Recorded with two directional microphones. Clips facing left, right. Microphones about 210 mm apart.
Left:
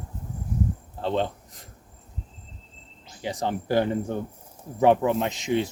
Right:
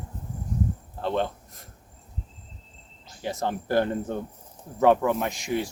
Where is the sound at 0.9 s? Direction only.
15° left (ahead or behind).